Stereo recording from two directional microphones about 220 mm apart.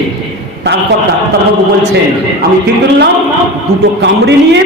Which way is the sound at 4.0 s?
50° right (ahead or behind).